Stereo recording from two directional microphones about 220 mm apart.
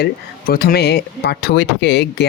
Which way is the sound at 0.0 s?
45° left (ahead or behind).